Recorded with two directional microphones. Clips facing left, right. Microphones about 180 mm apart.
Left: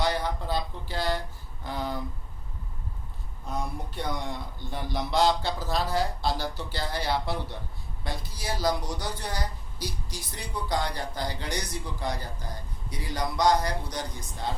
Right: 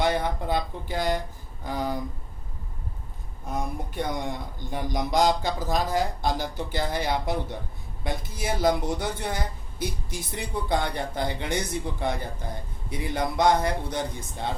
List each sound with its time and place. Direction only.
0.0 s speech: 20° right (ahead or behind)
3.5 s speech: 20° right (ahead or behind)
8.4 s speech: 20° right (ahead or behind)